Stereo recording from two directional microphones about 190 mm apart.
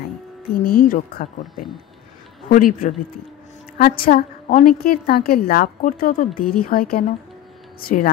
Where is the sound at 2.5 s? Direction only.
45° left (ahead or behind).